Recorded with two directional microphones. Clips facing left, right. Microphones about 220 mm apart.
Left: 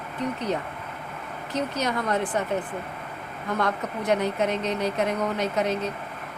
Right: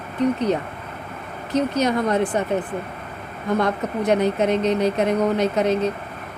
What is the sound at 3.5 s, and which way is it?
Speech, 20° right (ahead or behind).